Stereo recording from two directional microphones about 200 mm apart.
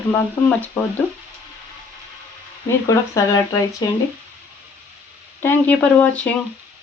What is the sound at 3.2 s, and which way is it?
Speech, 15° left (ahead or behind).